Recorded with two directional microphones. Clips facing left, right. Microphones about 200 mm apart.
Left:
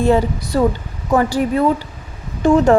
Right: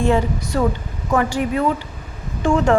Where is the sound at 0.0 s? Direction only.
35° left (ahead or behind).